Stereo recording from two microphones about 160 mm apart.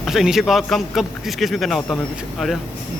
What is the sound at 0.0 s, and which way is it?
Speech, centre (ahead or behind).